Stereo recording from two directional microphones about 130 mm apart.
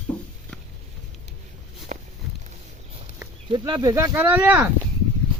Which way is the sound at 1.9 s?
70° right (ahead or behind).